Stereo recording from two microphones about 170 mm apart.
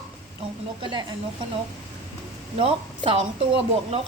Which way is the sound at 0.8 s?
25° right (ahead or behind).